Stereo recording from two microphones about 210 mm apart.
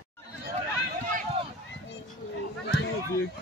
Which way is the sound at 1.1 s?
40° right (ahead or behind).